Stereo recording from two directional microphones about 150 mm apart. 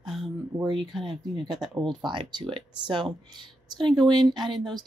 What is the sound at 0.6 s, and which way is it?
Speech, 30° right (ahead or behind).